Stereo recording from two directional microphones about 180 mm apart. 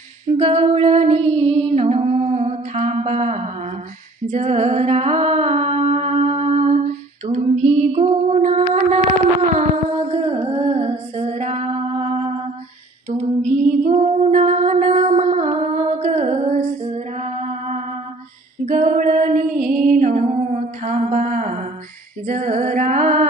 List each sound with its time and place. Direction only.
0.3 s music: 35° right (ahead or behind)
4.3 s humming: 40° right (ahead or behind)
10.1 s female singing: 35° right (ahead or behind)
19.9 s a sound: 45° right (ahead or behind)
22.3 s music: 45° right (ahead or behind)